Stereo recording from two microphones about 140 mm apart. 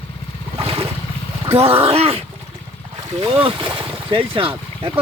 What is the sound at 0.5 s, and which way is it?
Vehicle, 40° right (ahead or behind).